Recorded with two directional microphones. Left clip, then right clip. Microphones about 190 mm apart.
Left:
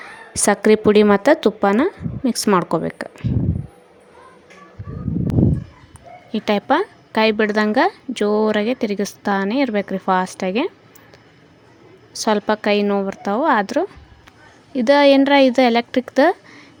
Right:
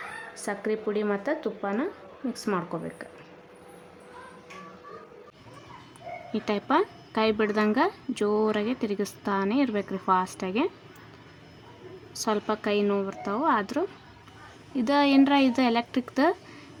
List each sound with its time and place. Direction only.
0.3 s speech: 55° left (ahead or behind)
6.3 s a woman's voice: 30° left (ahead or behind)
12.1 s a woman's voice: 30° left (ahead or behind)